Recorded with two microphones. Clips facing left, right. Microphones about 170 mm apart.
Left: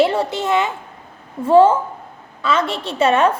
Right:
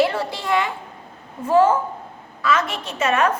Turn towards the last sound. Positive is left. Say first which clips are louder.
# left 5 dB
turn(degrees=30)  # may be behind; listen again after turning